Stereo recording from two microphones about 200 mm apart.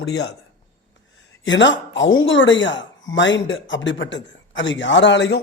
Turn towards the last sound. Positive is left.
turn(degrees=60)  # may be behind; listen again after turning